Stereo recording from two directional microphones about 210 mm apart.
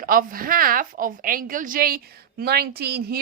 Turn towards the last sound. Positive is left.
turn(degrees=-50)  # may be behind; listen again after turning